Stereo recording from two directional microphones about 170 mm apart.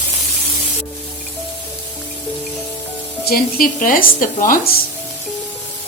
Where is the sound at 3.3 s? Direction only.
55° left (ahead or behind).